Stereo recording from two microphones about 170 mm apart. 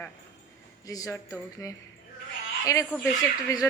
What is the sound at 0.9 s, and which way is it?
Speech, 20° left (ahead or behind).